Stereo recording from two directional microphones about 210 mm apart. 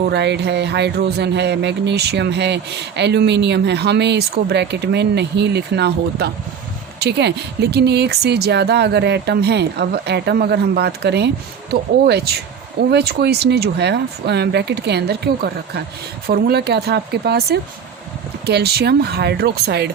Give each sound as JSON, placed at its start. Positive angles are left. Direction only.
{"t": 0.0, "sound": "speech", "side_deg": -55}